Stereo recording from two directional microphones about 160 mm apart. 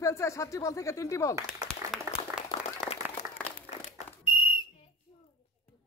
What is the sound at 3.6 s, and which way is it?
Crumpling, 45° left (ahead or behind).